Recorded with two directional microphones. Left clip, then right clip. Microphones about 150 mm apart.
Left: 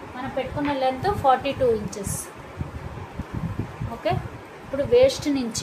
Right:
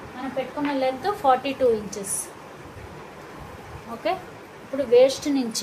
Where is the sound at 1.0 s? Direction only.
10° right (ahead or behind).